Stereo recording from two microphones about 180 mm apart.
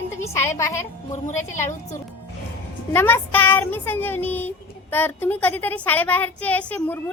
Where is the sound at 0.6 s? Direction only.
15° left (ahead or behind).